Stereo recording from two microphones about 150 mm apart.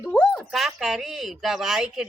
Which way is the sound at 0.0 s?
5° left (ahead or behind).